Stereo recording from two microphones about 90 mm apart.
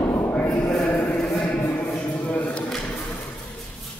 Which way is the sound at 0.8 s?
10° left (ahead or behind).